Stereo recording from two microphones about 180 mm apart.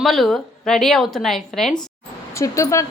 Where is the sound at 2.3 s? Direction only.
15° left (ahead or behind).